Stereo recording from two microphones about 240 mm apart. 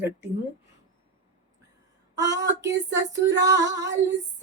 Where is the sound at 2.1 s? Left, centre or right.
Right.